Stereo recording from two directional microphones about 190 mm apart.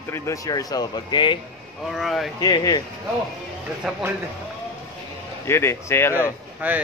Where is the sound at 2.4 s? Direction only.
20° left (ahead or behind).